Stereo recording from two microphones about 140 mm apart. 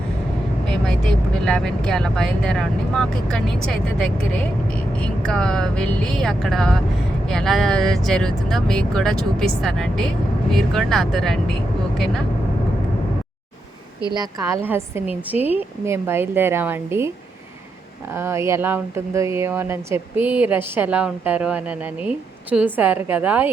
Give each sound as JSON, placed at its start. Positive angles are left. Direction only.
{"t": 0.7, "sound": "speech", "side_deg": 5}
{"t": 14.1, "sound": "a woman's voice", "side_deg": -30}
{"t": 14.6, "sound": "speech", "side_deg": -15}
{"t": 18.1, "sound": "speech", "side_deg": -15}